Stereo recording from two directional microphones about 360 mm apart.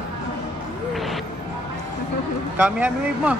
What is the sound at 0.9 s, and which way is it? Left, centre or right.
Music, centre.